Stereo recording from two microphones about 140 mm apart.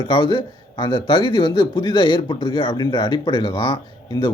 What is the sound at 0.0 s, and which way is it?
A man's voice, 35° left (ahead or behind).